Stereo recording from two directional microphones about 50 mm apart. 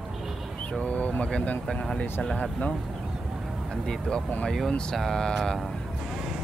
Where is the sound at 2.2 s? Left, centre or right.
Centre.